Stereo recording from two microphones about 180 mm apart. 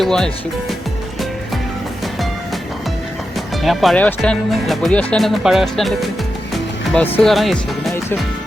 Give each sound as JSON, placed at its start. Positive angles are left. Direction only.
{"t": 0.0, "sound": "speech", "side_deg": 5}
{"t": 3.6, "sound": "speech", "side_deg": 0}